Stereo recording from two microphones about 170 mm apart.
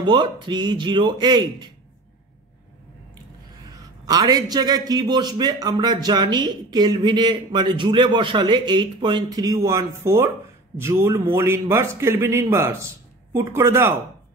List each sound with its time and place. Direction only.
0.0 s a man's voice: 25° right (ahead or behind)
3.7 s a man's voice: 20° right (ahead or behind)